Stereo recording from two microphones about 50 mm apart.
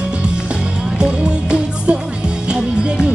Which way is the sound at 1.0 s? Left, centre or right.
Right.